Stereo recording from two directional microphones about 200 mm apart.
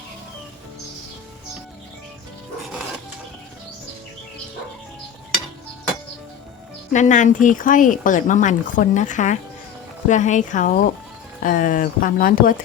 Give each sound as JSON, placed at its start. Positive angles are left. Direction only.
{"t": 6.9, "sound": "speech", "side_deg": 35}